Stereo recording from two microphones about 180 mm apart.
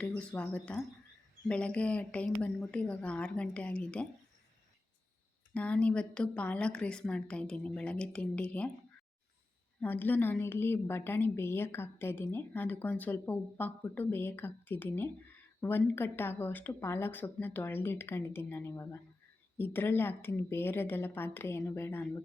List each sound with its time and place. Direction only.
0.2 s a woman's voice: 5° left (ahead or behind)
5.5 s a woman's voice: 5° left (ahead or behind)
9.8 s a woman's voice: 10° left (ahead or behind)